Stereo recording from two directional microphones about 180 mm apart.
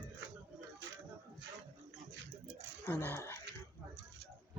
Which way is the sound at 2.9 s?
10° left (ahead or behind).